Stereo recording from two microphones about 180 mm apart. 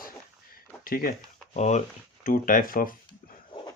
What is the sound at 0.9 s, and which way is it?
Speech, 55° left (ahead or behind).